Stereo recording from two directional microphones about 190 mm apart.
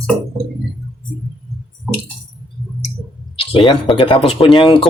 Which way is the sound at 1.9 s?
Centre (ahead or behind).